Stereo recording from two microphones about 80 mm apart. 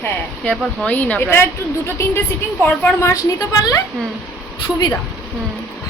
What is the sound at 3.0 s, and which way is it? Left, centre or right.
Speech, left.